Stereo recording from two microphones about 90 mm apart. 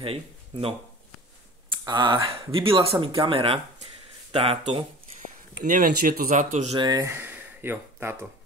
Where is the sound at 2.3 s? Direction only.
85° right.